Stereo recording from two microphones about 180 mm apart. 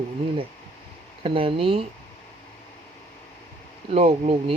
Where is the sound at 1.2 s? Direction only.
30° right (ahead or behind).